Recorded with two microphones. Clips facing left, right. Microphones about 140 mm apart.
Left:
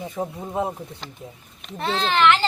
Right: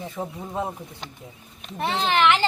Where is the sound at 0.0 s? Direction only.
15° left (ahead or behind).